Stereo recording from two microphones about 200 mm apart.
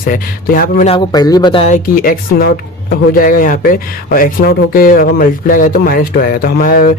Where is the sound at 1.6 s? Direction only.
40° left (ahead or behind).